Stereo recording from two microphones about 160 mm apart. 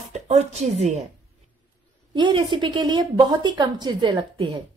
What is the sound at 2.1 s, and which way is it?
A woman's voice, 30° right (ahead or behind).